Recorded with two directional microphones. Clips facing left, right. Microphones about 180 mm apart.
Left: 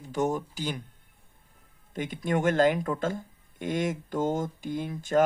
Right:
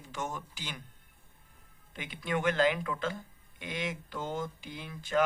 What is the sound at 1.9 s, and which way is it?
Speech, 45° left (ahead or behind).